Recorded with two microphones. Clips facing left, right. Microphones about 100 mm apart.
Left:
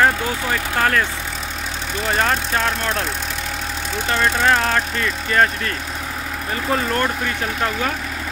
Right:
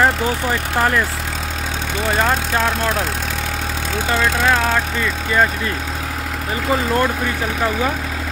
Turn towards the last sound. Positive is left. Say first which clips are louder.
# right 3 dB
turn(degrees=-10)  # may be behind; listen again after turning